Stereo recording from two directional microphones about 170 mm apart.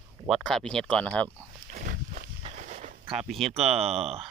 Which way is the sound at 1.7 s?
50° right (ahead or behind).